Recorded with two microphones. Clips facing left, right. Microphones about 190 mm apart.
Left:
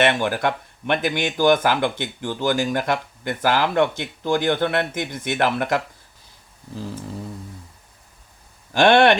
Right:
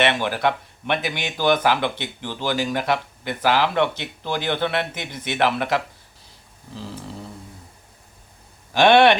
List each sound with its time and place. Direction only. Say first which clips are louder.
0.0 s speech: left 1 dB; 45° left (ahead or behind)
8.7 s speech: even; 50° left (ahead or behind)